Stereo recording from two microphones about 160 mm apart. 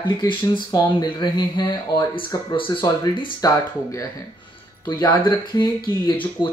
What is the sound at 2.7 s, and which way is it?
Speech, 30° left (ahead or behind).